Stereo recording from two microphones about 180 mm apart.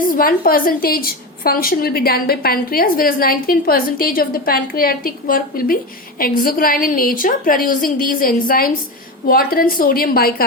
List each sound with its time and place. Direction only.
0.0 s a woman's voice: 50° left (ahead or behind)